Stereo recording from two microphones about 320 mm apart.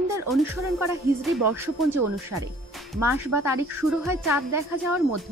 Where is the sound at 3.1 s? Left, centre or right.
Centre.